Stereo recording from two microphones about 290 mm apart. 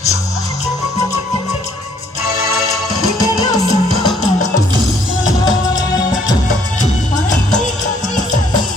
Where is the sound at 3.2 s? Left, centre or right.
Centre.